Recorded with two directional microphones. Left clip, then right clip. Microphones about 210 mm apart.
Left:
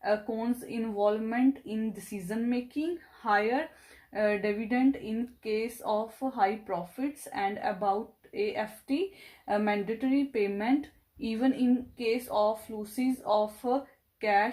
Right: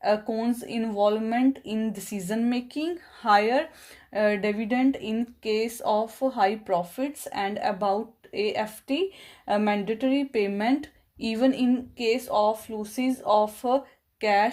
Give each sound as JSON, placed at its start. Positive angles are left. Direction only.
{"t": 0.0, "sound": "speech", "side_deg": -45}